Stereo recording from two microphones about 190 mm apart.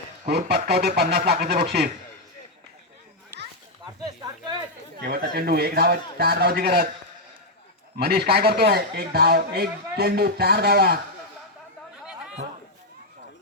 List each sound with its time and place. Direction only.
0.3 s speech: 60° right (ahead or behind)
4.0 s a sound: 20° right (ahead or behind)
4.9 s speech: 55° right (ahead or behind)
7.9 s speech: 55° right (ahead or behind)